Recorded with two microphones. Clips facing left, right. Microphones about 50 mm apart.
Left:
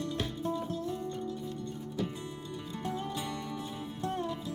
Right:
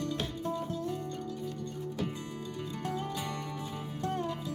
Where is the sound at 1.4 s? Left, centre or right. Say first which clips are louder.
Right 1 dB; left.